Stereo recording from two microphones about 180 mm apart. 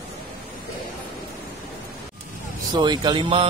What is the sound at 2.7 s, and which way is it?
Speech, 25° right (ahead or behind).